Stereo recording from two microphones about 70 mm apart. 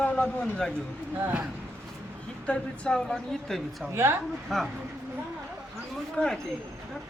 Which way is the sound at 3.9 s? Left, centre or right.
Right.